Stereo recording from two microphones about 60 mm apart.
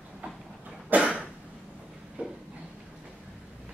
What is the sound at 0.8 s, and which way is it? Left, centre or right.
Cough, right.